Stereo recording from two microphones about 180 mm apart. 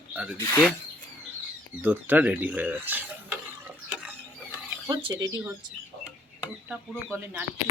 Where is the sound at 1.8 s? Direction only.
10° right (ahead or behind).